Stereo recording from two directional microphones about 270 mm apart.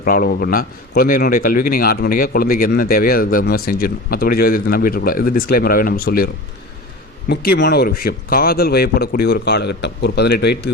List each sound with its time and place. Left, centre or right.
0.0 s a man's voice: left